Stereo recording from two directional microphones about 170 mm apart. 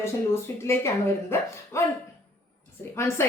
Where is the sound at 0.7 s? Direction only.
15° left (ahead or behind).